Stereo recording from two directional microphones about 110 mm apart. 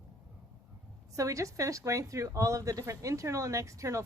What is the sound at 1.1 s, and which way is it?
A woman's voice, 30° right (ahead or behind).